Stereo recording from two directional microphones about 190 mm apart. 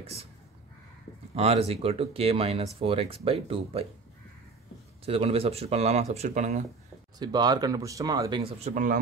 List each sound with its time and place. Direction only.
0.0 s speech: 30° right (ahead or behind)
1.3 s speech: 30° right (ahead or behind)
5.0 s speech: 30° right (ahead or behind)
7.2 s speech: 20° right (ahead or behind); by 9.0 s 45° right (ahead or behind)